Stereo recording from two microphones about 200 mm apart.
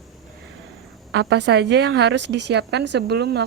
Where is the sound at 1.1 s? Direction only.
60° right (ahead or behind).